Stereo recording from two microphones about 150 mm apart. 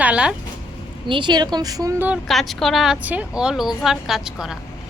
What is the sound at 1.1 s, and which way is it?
A woman's voice, 30° right (ahead or behind).